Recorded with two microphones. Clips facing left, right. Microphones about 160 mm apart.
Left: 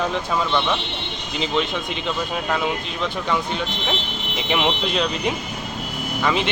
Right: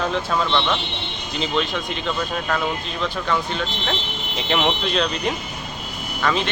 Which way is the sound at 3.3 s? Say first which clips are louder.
Even; 15° left (ahead or behind).